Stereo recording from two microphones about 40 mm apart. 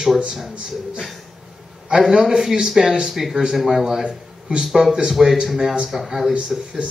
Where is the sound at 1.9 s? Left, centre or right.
Centre.